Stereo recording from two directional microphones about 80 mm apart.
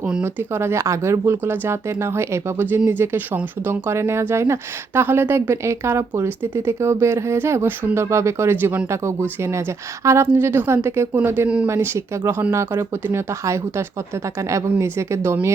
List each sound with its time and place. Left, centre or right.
0.5 s speech: right
10.0 s speech: right
10.2 s speech: right